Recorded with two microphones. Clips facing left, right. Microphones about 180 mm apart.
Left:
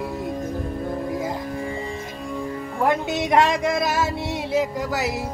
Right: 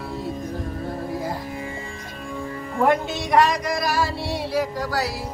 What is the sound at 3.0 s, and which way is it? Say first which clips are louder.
Music: even; 20° left (ahead or behind).